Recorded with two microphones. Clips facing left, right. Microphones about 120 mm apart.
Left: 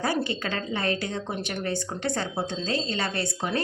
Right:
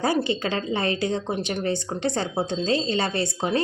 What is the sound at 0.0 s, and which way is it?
A woman's voice, 25° right (ahead or behind).